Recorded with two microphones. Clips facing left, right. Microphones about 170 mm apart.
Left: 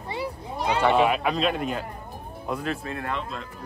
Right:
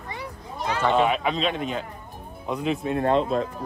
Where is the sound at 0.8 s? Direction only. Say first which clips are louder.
Even; 5° left (ahead or behind).